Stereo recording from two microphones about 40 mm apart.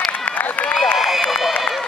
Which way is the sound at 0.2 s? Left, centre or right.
Left.